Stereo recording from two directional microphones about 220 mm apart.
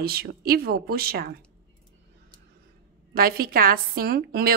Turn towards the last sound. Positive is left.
turn(degrees=-45)  # may be behind; listen again after turning